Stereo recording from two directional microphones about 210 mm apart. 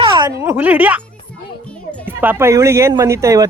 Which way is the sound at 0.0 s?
20° right (ahead or behind).